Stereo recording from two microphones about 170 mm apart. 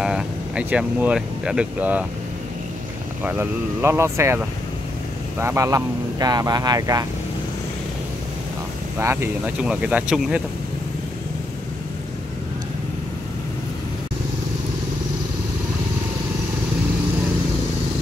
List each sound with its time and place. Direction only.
0.0 s speech: 5° right (ahead or behind)
3.3 s speech: 10° right (ahead or behind)
5.4 s speech: 15° right (ahead or behind)
8.9 s speech: 15° right (ahead or behind)